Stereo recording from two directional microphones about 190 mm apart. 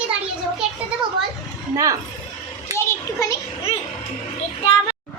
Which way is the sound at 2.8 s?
15° left (ahead or behind).